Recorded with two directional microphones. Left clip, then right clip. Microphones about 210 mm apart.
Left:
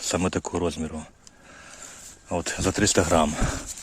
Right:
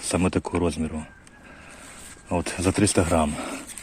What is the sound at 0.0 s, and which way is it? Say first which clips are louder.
Speech: right 1 dB; 10° left (ahead or behind).